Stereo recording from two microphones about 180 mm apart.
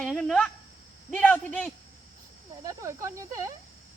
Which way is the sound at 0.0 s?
Centre (ahead or behind).